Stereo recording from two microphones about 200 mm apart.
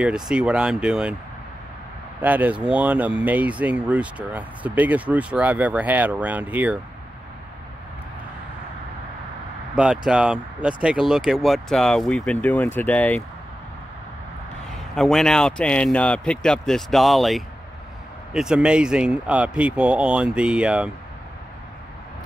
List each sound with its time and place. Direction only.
0.0 s speech: 5° right (ahead or behind)
2.2 s speech: 10° right (ahead or behind)
9.8 s speech: 5° right (ahead or behind)
15.0 s speech: centre (ahead or behind)